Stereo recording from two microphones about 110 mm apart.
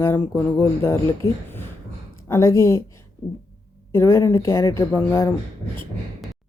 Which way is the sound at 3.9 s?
25° left (ahead or behind).